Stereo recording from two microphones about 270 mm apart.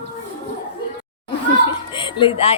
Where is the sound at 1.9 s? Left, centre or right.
Centre.